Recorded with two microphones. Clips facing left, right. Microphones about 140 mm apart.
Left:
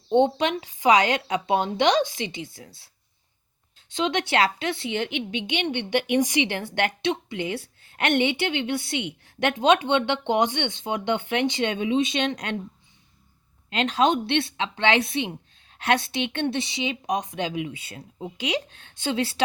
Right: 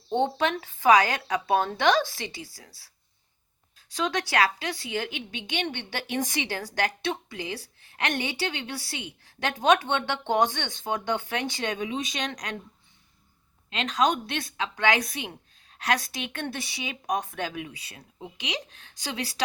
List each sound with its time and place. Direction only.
0.1 s a woman's voice: 20° left (ahead or behind)
13.7 s speech: 30° left (ahead or behind)